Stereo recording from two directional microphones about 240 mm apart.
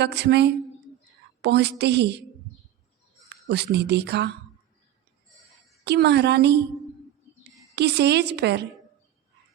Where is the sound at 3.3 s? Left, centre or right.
Right.